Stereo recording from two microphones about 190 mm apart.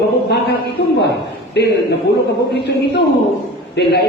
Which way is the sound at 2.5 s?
65° left (ahead or behind).